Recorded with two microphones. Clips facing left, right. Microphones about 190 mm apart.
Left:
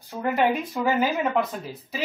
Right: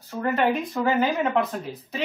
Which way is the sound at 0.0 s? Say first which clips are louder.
Even; 15° left (ahead or behind).